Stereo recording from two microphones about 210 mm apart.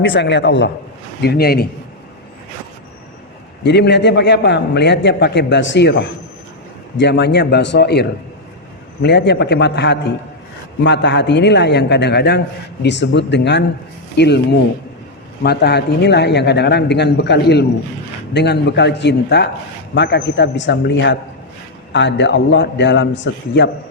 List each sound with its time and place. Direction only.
0.0 s a man's voice: 55° left (ahead or behind)
3.6 s a man's voice: 55° left (ahead or behind)
15.4 s a man's voice: 50° left (ahead or behind)